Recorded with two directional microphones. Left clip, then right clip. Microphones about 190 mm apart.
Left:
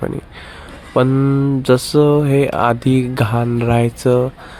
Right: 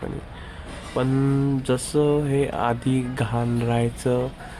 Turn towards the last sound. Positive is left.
turn(degrees=30)  # may be behind; listen again after turning